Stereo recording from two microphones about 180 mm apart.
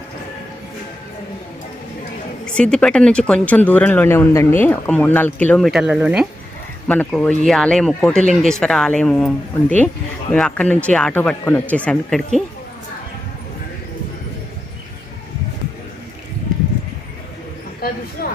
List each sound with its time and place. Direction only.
2.6 s speech: 5° left (ahead or behind)
6.8 s speech: 5° left (ahead or behind)
18.2 s a sound: 60° left (ahead or behind)